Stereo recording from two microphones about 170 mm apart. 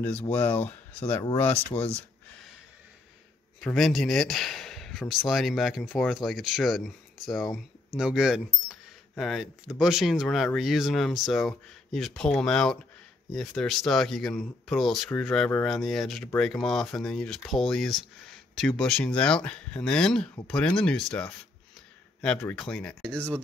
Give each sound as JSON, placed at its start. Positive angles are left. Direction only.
{"t": 0.3, "sound": "speech", "side_deg": 10}
{"t": 1.7, "sound": "speech", "side_deg": 35}
{"t": 3.6, "sound": "speech", "side_deg": 0}